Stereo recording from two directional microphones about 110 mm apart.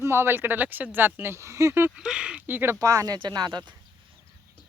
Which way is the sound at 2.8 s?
30° right (ahead or behind).